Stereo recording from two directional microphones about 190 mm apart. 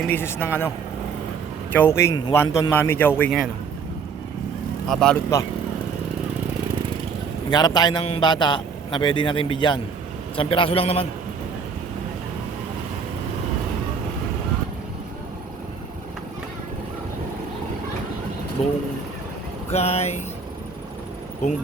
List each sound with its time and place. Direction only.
0.0 s a man's voice: 10° left (ahead or behind)
1.7 s a man's voice: 10° left (ahead or behind)
4.9 s a man's voice: 5° left (ahead or behind)
7.5 s a man's voice: 20° left (ahead or behind)
18.6 s speech: 35° left (ahead or behind)